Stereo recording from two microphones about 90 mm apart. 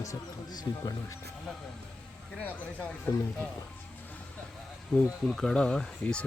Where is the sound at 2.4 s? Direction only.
15° left (ahead or behind).